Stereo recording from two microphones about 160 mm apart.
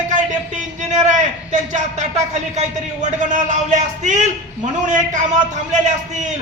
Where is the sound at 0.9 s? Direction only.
50° right (ahead or behind).